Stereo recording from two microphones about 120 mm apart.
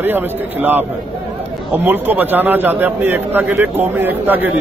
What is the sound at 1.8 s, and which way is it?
A man's voice, 15° right (ahead or behind).